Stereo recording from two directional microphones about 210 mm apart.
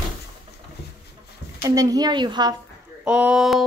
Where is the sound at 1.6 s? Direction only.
15° right (ahead or behind).